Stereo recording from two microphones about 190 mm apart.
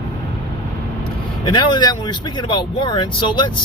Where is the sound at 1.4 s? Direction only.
25° left (ahead or behind).